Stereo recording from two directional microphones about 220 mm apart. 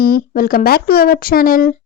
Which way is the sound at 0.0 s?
45° left (ahead or behind).